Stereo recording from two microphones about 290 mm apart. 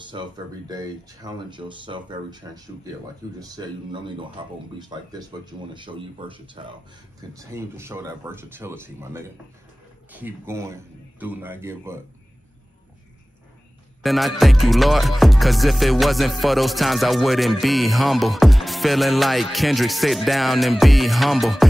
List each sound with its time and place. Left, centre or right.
0.0 s speech: centre
14.0 s music: centre